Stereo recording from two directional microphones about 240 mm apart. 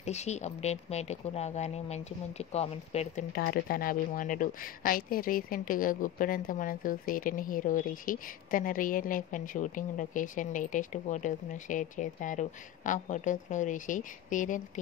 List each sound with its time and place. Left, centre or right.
0.0 s speech: left